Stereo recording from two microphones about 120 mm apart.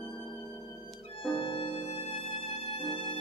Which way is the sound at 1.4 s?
45° left (ahead or behind).